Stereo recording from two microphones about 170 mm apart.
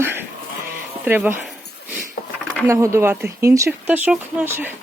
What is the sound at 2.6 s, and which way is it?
Speech, 15° right (ahead or behind).